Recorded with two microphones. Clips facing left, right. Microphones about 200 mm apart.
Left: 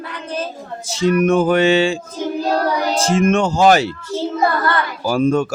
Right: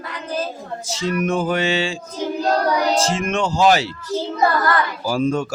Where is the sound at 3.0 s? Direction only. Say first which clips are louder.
Left 5 dB; 50° left (ahead or behind).